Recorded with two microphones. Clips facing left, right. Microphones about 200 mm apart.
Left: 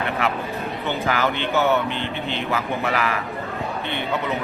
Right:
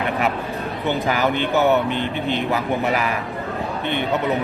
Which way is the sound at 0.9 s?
15° right (ahead or behind).